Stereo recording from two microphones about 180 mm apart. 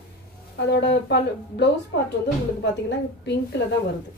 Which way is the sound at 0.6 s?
70° left (ahead or behind).